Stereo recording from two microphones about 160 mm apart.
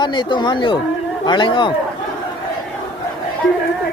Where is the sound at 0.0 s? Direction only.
30° left (ahead or behind).